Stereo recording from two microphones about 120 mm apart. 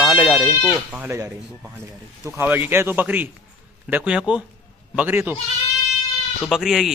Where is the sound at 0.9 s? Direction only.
15° right (ahead or behind).